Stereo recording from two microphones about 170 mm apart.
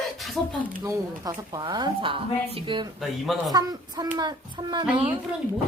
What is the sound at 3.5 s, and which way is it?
A woman's voice, 25° right (ahead or behind).